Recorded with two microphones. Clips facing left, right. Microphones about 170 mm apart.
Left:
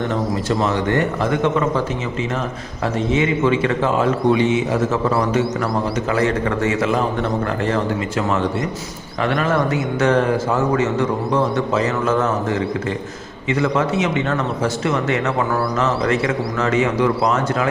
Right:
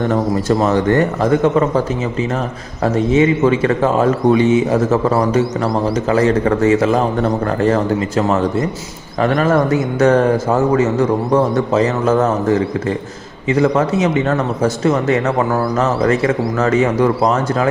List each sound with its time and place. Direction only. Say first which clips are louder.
0.1 s a man's voice: right 5 dB; 45° right (ahead or behind)
2.8 s a man's voice: right 6 dB; 40° right (ahead or behind)